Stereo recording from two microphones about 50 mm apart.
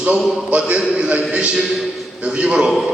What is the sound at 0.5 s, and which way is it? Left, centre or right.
A man's voice, right.